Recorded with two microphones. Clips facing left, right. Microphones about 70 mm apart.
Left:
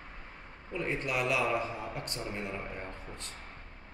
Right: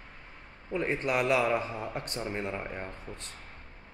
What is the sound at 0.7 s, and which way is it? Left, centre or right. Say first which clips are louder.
Speech: right 4 dB; right.